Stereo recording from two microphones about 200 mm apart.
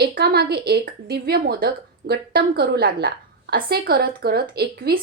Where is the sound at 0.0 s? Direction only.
50° right (ahead or behind).